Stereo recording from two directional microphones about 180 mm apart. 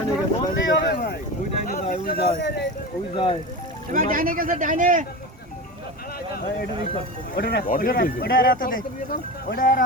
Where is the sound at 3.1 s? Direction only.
30° left (ahead or behind).